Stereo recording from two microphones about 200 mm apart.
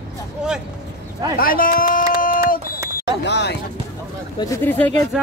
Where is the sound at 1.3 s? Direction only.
45° left (ahead or behind).